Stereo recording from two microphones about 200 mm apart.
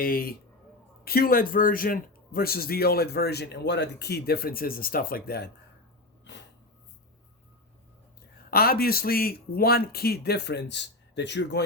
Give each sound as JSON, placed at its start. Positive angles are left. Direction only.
{"t": 0.0, "sound": "speech", "side_deg": 45}
{"t": 6.3, "sound": "a sound", "side_deg": 65}
{"t": 8.4, "sound": "speech", "side_deg": 50}